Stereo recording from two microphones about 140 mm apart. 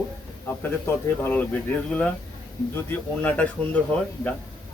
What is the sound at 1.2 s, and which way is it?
Speech, 10° left (ahead or behind).